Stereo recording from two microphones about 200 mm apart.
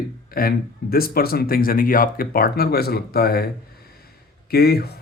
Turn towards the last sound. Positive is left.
turn(degrees=50)  # may be behind; listen again after turning